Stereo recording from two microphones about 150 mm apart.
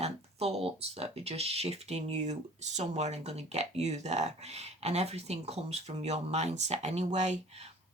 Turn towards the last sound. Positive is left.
turn(degrees=-50)  # may be behind; listen again after turning